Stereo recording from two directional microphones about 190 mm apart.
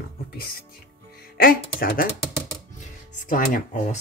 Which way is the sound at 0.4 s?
55° left (ahead or behind).